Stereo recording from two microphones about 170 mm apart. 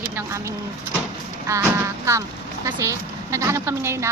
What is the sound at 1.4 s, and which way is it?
A woman's voice, 15° right (ahead or behind).